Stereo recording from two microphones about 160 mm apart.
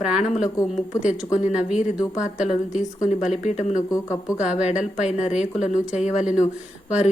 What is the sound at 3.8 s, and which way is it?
Speech, 20° left (ahead or behind).